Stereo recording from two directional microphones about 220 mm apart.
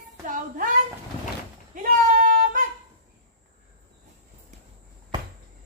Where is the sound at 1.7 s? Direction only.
40° right (ahead or behind).